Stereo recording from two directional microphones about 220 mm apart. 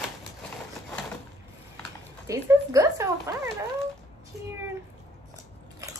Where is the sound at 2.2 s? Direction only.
15° right (ahead or behind).